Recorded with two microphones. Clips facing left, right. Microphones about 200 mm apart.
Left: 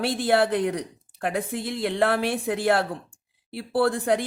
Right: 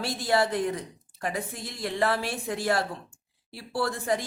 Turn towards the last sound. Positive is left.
turn(degrees=55)  # may be behind; listen again after turning